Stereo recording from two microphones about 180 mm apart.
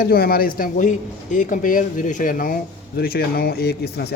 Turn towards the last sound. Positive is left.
turn(degrees=60)  # may be behind; listen again after turning